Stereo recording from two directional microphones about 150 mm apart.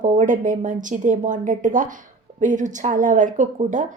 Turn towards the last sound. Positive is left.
turn(degrees=-60)  # may be behind; listen again after turning